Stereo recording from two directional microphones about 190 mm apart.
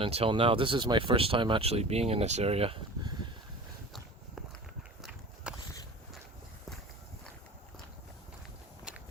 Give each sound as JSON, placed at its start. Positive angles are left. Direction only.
{"t": 0.0, "sound": "speech", "side_deg": -30}
{"t": 5.0, "sound": "horse", "side_deg": -5}